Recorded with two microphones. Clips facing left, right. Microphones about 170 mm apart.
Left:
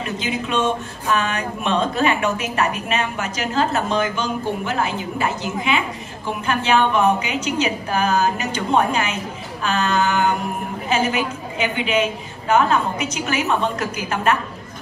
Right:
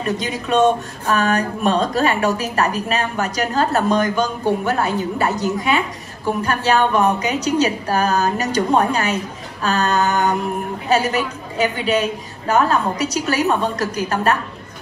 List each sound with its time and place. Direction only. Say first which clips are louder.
0.0 s speech: right 2 dB; 35° right (ahead or behind)